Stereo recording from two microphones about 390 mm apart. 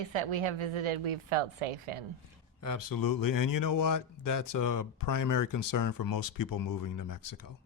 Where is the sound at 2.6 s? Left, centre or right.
Left.